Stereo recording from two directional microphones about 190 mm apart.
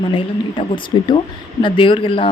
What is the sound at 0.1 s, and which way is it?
Speech, 25° left (ahead or behind).